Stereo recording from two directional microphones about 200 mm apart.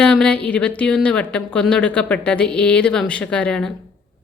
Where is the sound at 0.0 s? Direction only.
5° left (ahead or behind).